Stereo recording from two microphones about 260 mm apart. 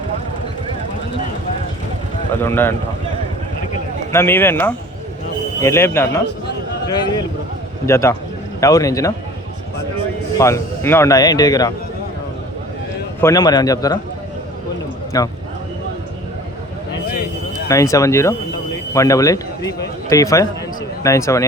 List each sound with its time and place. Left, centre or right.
2.4 s a man's voice: centre
4.1 s a man's voice: centre
6.2 s a sound: left
6.8 s a man's voice: centre
10.3 s a man's voice: centre
13.2 s a man's voice: centre
15.1 s a man's voice: centre
17.7 s a man's voice: centre